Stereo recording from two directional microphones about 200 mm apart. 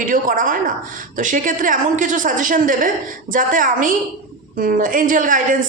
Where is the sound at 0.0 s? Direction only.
40° right (ahead or behind).